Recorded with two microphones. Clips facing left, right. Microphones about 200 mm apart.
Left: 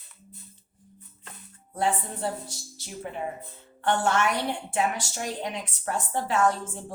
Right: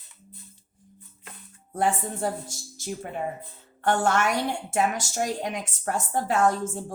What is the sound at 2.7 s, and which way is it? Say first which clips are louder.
A woman's voice: right 3 dB; 45° right (ahead or behind).